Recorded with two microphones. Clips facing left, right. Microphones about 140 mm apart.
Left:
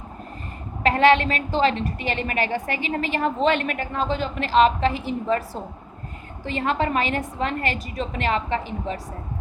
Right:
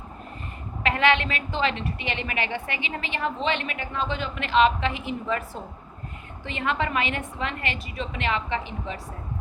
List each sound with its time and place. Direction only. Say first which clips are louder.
0.8 s a woman's voice: left 5 dB; 35° left (ahead or behind)
6.4 s a woman's voice: left 4 dB; 35° left (ahead or behind)